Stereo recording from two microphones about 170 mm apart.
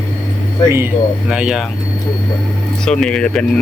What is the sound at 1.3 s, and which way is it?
Speech, 5° right (ahead or behind).